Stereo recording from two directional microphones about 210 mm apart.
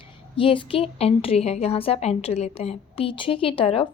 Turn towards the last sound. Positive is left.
turn(degrees=25)  # may be behind; listen again after turning